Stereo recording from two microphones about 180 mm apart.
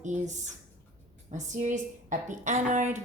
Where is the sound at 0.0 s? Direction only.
40° right (ahead or behind).